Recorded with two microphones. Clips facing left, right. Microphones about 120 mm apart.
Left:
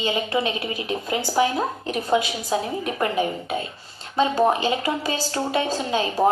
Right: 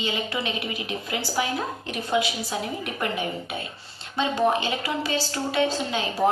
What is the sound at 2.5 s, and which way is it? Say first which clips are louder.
A woman's voice: left 5 dB; 30° left (ahead or behind).